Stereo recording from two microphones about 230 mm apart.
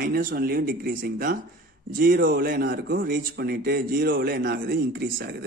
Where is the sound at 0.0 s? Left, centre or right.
Right.